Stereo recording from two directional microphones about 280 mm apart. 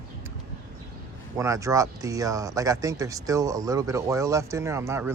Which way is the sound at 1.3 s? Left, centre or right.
Centre.